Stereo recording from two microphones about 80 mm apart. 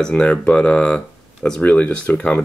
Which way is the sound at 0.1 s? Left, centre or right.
Centre.